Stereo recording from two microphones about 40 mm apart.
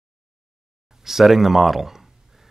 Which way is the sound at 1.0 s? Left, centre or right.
Centre.